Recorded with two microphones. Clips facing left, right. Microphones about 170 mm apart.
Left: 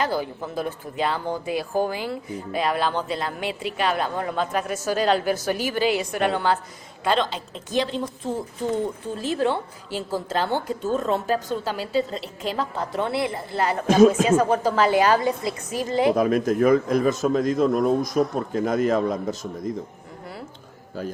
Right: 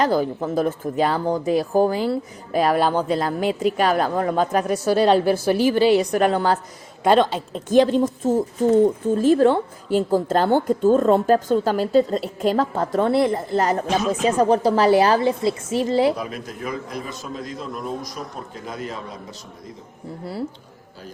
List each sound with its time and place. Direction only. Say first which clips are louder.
0.0 s a woman's voice: right 6 dB; 45° right (ahead or behind)
16.1 s a man's voice: left 11 dB; 50° left (ahead or behind)